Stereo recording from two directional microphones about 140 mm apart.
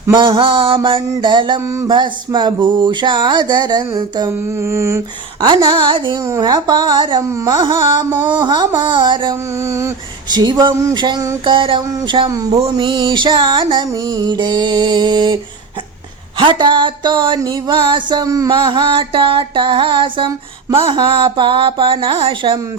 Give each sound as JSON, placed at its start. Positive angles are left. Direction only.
{"t": 0.1, "sound": "music", "side_deg": -35}
{"t": 5.6, "sound": "music", "side_deg": -35}
{"t": 9.6, "sound": "female singing", "side_deg": -20}
{"t": 10.3, "sound": "music", "side_deg": -30}
{"t": 16.4, "sound": "music", "side_deg": -35}